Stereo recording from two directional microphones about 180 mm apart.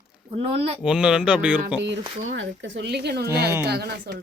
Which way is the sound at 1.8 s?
80° right.